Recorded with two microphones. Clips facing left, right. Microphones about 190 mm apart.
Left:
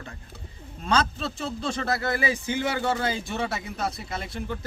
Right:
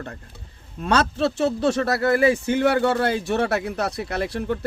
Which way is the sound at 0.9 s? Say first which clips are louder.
Right 5 dB; 70° right (ahead or behind).